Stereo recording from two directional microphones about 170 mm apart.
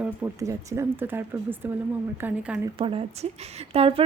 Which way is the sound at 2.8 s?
30° right (ahead or behind).